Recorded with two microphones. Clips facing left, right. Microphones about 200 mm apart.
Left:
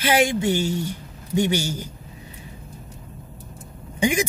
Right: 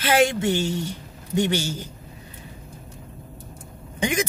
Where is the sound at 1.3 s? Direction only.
10° left (ahead or behind).